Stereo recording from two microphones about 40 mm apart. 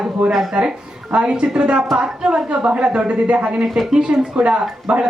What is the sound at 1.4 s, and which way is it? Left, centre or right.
Speech, right.